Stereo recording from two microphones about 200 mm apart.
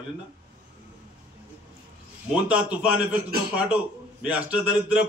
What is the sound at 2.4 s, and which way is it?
A man's voice, 5° right (ahead or behind).